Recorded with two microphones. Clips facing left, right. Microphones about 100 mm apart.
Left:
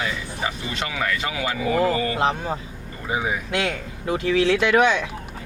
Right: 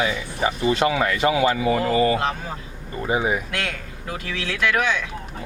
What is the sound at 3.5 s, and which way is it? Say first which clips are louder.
Speech: left 4 dB; 20° left (ahead or behind).